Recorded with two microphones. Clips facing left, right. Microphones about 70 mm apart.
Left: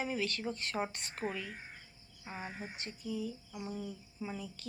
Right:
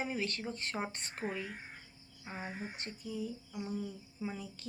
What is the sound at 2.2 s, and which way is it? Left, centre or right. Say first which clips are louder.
Speech: even; centre.